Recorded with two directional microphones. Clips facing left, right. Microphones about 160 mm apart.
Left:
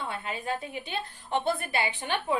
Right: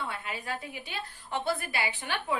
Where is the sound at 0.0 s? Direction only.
25° left (ahead or behind).